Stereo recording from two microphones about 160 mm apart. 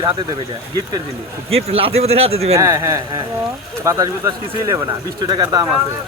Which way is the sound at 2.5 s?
20° right (ahead or behind).